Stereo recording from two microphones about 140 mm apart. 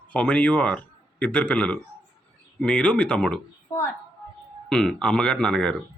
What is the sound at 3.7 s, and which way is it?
Speech, 20° left (ahead or behind).